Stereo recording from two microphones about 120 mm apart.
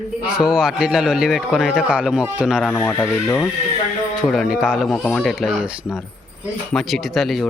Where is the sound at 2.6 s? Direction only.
15° left (ahead or behind).